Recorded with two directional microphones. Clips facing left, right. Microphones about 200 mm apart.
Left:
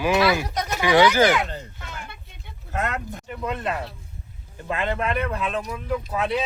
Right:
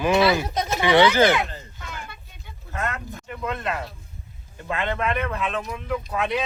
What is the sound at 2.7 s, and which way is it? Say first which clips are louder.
Speech: left 2 dB; 50° left (ahead or behind).